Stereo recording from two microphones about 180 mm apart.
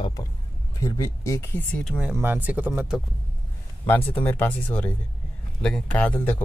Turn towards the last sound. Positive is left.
turn(degrees=10)  # may be behind; listen again after turning